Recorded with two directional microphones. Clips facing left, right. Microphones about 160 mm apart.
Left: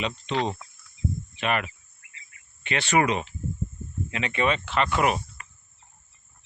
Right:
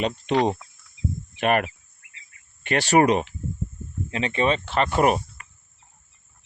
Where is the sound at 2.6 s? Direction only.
40° right (ahead or behind).